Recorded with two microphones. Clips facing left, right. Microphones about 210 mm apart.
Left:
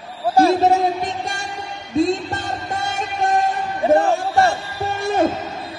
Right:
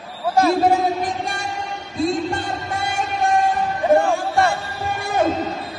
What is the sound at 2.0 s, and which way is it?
Music, 45° left (ahead or behind).